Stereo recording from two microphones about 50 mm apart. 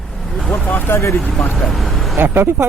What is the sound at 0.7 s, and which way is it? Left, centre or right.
Speech, left.